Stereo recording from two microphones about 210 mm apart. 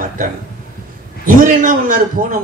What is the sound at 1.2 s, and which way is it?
Speech, 40° right (ahead or behind).